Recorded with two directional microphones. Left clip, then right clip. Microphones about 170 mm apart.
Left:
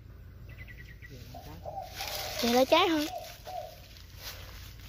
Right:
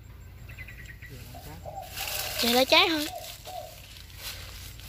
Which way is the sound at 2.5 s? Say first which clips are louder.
Right 3 dB; 25° left (ahead or behind).